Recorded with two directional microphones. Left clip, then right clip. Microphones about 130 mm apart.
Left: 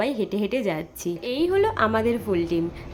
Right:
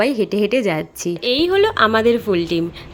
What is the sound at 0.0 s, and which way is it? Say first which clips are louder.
Speech: right 8 dB; 40° right (ahead or behind).